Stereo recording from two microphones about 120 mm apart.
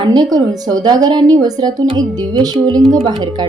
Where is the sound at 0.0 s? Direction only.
35° right (ahead or behind).